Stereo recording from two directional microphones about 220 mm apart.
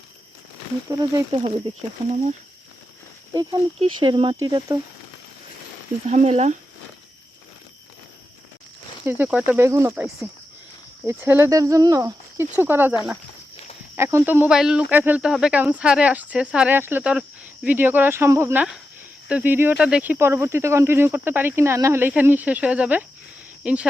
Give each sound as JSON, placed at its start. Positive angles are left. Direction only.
{"t": 0.9, "sound": "speech", "side_deg": -15}
{"t": 3.8, "sound": "speech", "side_deg": -25}
{"t": 6.1, "sound": "speech", "side_deg": -30}
{"t": 9.0, "sound": "speech", "side_deg": -10}
{"t": 13.9, "sound": "speech", "side_deg": -10}